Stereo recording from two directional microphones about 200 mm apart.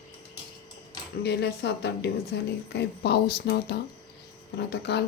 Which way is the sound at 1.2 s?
55° left (ahead or behind).